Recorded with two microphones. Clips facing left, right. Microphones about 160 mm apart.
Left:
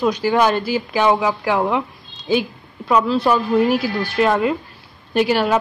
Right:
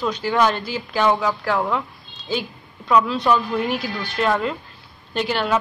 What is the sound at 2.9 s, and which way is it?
A woman's voice, 10° left (ahead or behind).